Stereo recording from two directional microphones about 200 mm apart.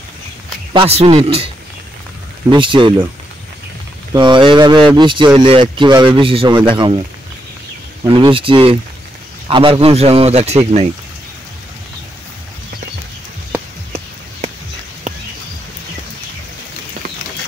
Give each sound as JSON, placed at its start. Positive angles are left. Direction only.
{"t": 0.7, "sound": "speech", "side_deg": -30}
{"t": 2.5, "sound": "speech", "side_deg": -25}
{"t": 4.1, "sound": "speech", "side_deg": -25}
{"t": 8.0, "sound": "speech", "side_deg": -25}